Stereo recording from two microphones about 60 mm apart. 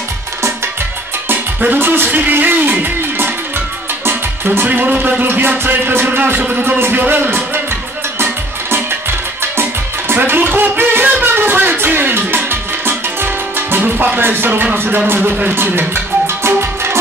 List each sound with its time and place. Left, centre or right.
1.3 s speech: right
4.6 s speech: right
5.2 s music: right
6.0 s speech: right
6.8 s music: right
9.4 s music: right